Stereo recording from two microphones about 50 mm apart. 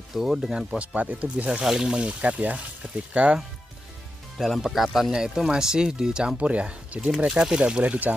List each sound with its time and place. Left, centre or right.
0.1 s speech: centre
0.7 s speech: right
1.6 s speech: centre
4.4 s speech: centre
5.1 s speech: centre
7.2 s speech: centre